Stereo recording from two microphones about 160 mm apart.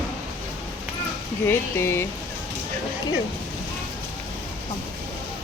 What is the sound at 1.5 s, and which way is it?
Speech, 15° left (ahead or behind).